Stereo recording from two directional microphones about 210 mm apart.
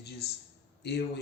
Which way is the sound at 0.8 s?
50° left (ahead or behind).